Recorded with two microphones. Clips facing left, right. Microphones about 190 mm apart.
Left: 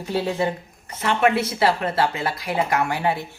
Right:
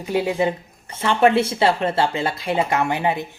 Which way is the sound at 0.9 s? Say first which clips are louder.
Right 3 dB; 30° right (ahead or behind).